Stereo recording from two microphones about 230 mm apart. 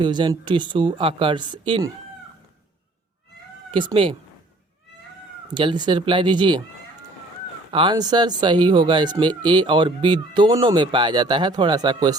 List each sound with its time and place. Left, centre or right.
0.0 s speech: centre
3.7 s speech: right
5.5 s speech: centre
7.7 s speech: right